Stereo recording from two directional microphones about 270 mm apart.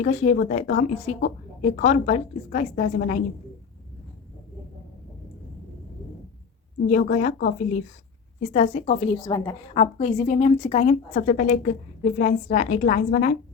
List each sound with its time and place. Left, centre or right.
0.0 s a woman's voice: left
6.8 s a woman's voice: left
9.7 s a woman's voice: left